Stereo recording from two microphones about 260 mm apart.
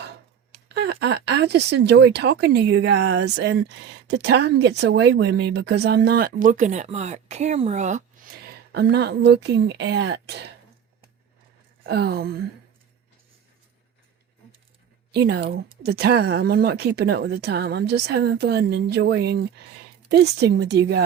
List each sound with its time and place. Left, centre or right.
0.7 s a woman's voice: right
11.8 s a woman's voice: right
15.1 s a woman's voice: right